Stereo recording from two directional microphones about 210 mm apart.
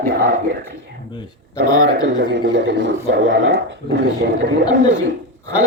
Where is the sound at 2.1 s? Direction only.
55° right (ahead or behind).